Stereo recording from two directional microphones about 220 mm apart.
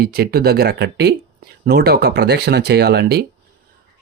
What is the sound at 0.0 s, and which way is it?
Speech, 45° right (ahead or behind).